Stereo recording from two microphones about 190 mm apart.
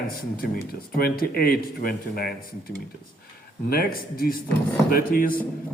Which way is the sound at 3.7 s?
50° left (ahead or behind).